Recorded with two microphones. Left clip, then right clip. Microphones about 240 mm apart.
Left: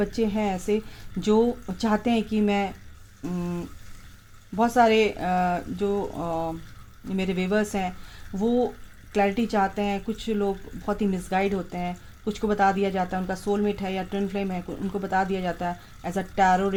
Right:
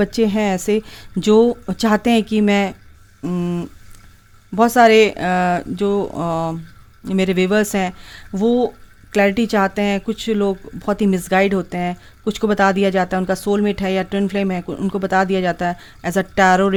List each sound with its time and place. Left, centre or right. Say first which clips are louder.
0.0 s speech: right 8 dB; right